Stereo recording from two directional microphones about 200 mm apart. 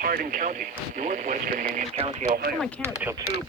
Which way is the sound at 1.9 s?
30° right (ahead or behind).